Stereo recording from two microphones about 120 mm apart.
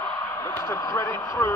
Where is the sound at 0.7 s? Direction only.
30° left (ahead or behind).